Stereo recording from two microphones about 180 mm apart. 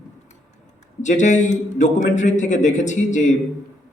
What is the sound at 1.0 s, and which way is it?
A man's voice, 40° left (ahead or behind).